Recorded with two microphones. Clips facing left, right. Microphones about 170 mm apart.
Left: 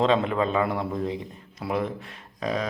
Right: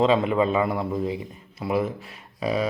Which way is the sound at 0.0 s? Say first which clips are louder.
Right 2 dB; 5° right (ahead or behind).